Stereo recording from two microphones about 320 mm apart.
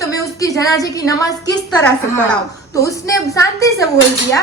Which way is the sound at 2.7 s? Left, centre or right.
Centre.